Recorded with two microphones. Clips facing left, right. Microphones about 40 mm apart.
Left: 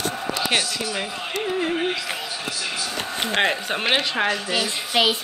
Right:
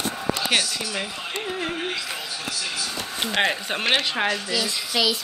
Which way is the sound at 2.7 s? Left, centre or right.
Left.